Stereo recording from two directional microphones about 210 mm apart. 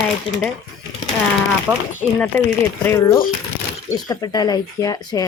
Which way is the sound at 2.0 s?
5° left (ahead or behind).